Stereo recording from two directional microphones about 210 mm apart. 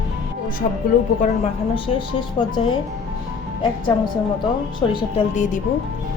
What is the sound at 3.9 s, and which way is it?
Speech, 20° left (ahead or behind).